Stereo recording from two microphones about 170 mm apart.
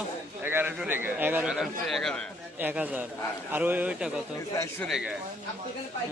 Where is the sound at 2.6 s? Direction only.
10° right (ahead or behind).